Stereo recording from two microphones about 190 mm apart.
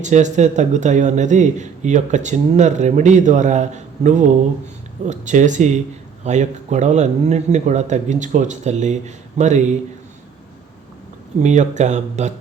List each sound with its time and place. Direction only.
0.0 s speech: 40° right (ahead or behind)
11.3 s speech: 40° right (ahead or behind)